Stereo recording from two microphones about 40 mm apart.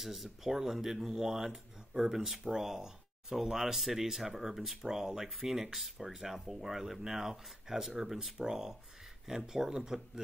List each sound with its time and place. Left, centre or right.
0.0 s speech: centre